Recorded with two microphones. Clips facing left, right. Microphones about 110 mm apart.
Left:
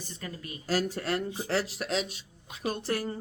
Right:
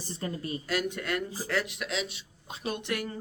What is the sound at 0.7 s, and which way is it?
Speech, 35° left (ahead or behind).